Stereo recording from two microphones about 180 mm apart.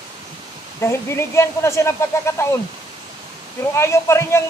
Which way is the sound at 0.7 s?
15° left (ahead or behind).